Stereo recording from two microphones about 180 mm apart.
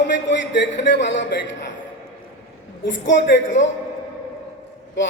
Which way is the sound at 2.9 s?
90° left.